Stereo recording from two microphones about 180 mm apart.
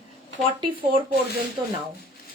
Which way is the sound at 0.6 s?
25° right (ahead or behind).